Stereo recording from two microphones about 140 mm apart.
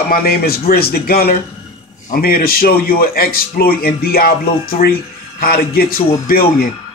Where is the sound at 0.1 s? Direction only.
90° left.